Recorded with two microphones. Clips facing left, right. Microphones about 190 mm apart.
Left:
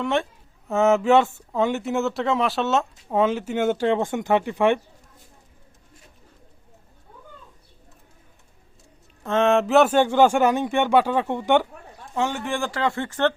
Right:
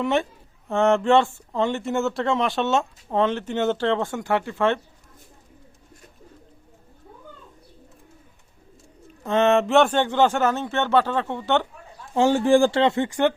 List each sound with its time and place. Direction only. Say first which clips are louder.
0.0 s speech: right 1 dB; centre (ahead or behind); by 4.8 s 15° left (ahead or behind)
9.2 s speech: right 1 dB; centre (ahead or behind)
12.1 s speech: right 9 dB; 30° right (ahead or behind); by 13.3 s 15° right (ahead or behind)